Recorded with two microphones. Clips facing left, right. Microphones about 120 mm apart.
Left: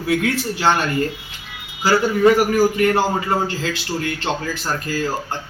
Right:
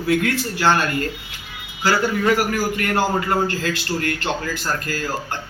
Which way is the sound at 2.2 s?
20° left (ahead or behind).